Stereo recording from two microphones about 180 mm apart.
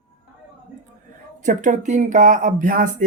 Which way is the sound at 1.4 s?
45° right (ahead or behind).